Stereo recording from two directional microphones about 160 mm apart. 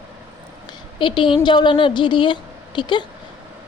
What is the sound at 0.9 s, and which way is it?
A woman's voice, 30° left (ahead or behind).